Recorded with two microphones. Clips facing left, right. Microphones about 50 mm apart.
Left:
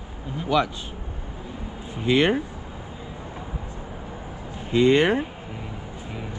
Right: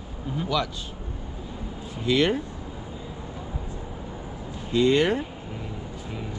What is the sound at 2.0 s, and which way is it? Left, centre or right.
Speech, left.